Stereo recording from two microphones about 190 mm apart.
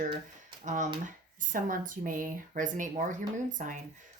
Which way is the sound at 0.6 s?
40° right (ahead or behind).